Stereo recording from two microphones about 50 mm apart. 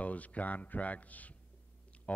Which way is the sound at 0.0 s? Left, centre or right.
Left.